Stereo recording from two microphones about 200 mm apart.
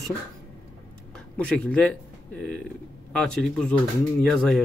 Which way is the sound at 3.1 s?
5° left (ahead or behind).